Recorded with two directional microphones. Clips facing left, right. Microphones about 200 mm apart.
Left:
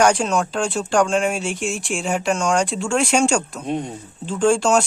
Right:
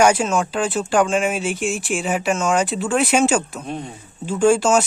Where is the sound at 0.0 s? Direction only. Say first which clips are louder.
Right 1 dB; 5° right (ahead or behind).